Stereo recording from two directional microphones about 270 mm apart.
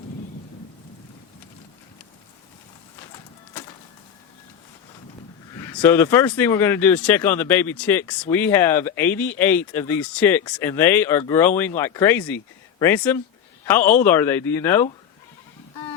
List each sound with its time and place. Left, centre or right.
3.1 s music: centre
5.5 s speech: centre